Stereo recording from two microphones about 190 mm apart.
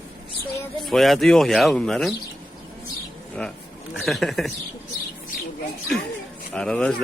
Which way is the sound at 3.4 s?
5° left (ahead or behind).